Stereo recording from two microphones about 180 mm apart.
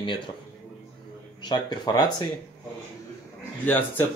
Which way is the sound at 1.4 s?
25° left (ahead or behind).